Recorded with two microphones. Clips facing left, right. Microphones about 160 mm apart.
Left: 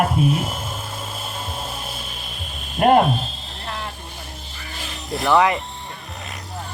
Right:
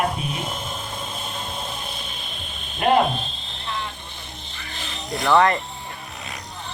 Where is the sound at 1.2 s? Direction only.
5° left (ahead or behind).